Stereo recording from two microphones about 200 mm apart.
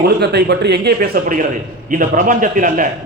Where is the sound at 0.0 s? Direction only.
55° right (ahead or behind).